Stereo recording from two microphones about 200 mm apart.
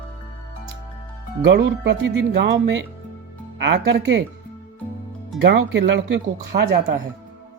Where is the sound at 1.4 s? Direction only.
60° right (ahead or behind).